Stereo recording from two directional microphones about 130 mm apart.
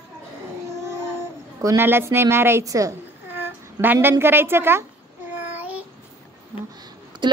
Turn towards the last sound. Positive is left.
turn(degrees=-35)  # may be behind; listen again after turning